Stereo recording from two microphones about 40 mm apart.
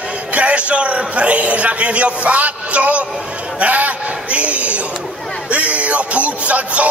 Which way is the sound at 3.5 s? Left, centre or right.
Right.